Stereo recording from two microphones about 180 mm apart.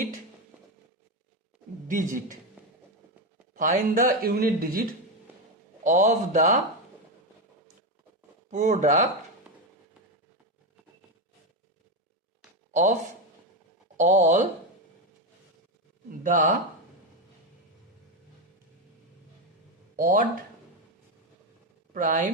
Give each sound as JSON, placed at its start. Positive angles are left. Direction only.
{"t": 1.9, "sound": "a woman's voice", "side_deg": -45}
{"t": 3.5, "sound": "speech", "side_deg": -45}
{"t": 5.8, "sound": "speech", "side_deg": -40}
{"t": 8.4, "sound": "speech", "side_deg": -40}
{"t": 12.7, "sound": "speech", "side_deg": -40}
{"t": 16.2, "sound": "a woman's voice", "side_deg": -45}
{"t": 20.0, "sound": "a woman's voice", "side_deg": -50}
{"t": 21.9, "sound": "a woman's voice", "side_deg": -45}